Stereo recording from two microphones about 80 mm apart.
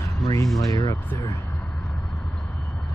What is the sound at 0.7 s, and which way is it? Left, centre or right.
Speech, left.